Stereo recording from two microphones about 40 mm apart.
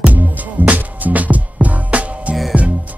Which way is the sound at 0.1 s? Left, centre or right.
Right.